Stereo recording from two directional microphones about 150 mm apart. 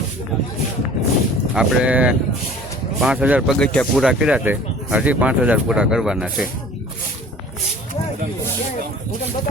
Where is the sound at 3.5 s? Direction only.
5° left (ahead or behind).